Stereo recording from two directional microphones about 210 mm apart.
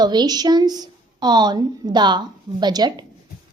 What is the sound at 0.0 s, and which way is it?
A woman's voice, 20° right (ahead or behind).